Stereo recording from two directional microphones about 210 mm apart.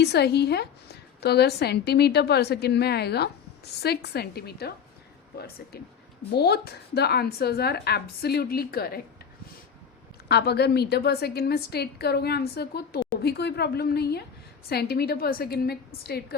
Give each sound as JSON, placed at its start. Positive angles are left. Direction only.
{"t": 0.0, "sound": "a woman's voice", "side_deg": 50}
{"t": 6.3, "sound": "a woman's voice", "side_deg": 50}
{"t": 10.2, "sound": "a woman's voice", "side_deg": 50}